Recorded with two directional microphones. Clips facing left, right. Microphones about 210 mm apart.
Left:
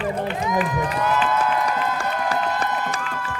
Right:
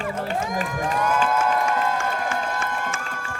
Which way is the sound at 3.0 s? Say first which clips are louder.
Left 4 dB; 45° right (ahead or behind).